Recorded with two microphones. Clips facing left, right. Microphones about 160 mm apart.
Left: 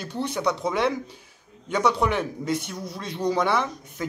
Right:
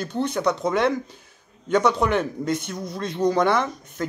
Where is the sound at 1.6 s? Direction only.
10° left (ahead or behind).